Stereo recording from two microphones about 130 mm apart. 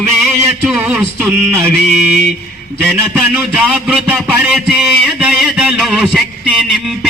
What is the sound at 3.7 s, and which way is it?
A man's voice, 5° right (ahead or behind).